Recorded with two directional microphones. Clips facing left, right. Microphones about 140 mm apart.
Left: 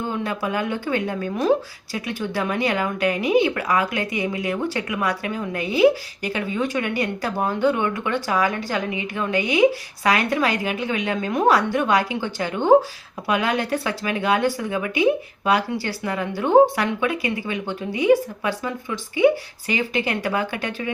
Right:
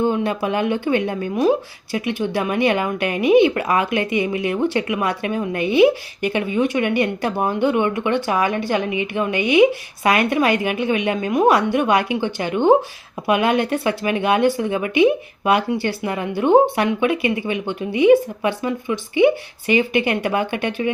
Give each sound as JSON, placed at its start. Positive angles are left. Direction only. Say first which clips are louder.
{"t": 0.0, "sound": "speech", "louder": "right 6 dB", "side_deg": -20}